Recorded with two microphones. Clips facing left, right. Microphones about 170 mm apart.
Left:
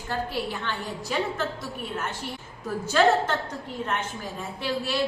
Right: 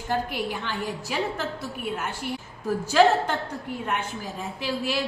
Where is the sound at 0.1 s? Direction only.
10° right (ahead or behind).